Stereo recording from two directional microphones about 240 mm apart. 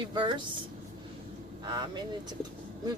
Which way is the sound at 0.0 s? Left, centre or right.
Centre.